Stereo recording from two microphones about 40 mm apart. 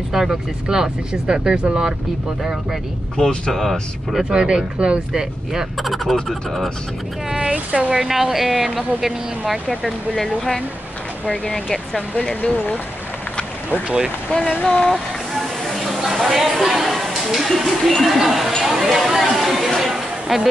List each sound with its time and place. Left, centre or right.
0.1 s speech: centre
4.2 s speech: right
5.1 s speech: centre
5.8 s speech: centre
7.3 s speech: right
7.9 s speech: centre
9.8 s speech: centre
11.2 s speech: left
12.4 s speech: left
14.6 s speech: centre
15.6 s a sound: centre
17.6 s speech: centre